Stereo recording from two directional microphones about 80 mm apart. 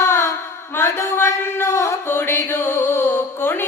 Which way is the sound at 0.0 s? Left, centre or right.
Left.